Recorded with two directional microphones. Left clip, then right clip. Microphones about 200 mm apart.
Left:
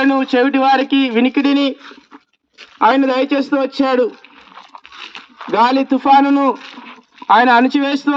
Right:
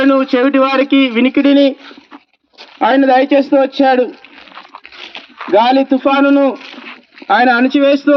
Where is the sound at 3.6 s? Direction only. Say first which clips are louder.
Right 4 dB; 25° left (ahead or behind).